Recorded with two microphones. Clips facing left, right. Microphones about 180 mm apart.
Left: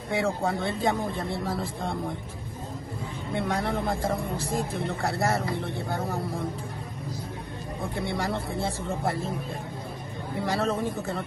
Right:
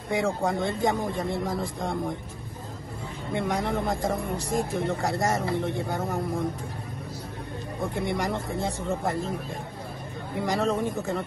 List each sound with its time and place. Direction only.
0.5 s speech: 15° right (ahead or behind)
3.3 s speech: 15° right (ahead or behind)
7.9 s speech: 15° right (ahead or behind)
10.4 s speech: 15° right (ahead or behind)